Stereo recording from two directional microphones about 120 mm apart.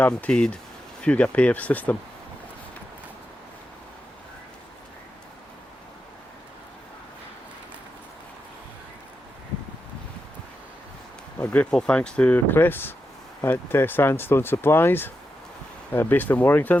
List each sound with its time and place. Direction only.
0.0 s speech: 10° left (ahead or behind)
11.3 s speech: 10° left (ahead or behind)